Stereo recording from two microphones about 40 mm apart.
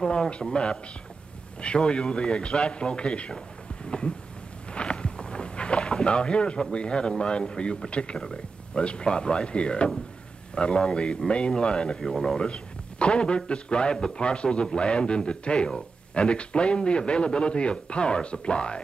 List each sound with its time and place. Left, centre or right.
0.1 s speech: left
3.9 s a sound: left
4.7 s speech: left
12.0 s speech: centre
12.4 s speech: left